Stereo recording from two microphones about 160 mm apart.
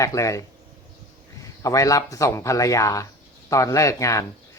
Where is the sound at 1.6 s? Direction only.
20° left (ahead or behind).